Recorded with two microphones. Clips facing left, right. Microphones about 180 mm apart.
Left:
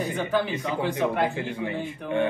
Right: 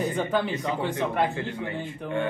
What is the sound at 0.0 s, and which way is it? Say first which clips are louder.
Speech: even; centre (ahead or behind).